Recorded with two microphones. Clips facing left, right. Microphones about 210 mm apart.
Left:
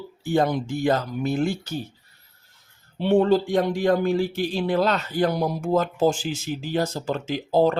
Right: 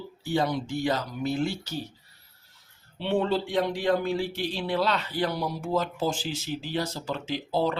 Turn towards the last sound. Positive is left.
turn(degrees=45)  # may be behind; listen again after turning